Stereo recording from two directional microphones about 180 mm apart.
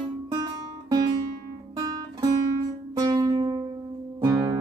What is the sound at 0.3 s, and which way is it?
Music, 20° right (ahead or behind).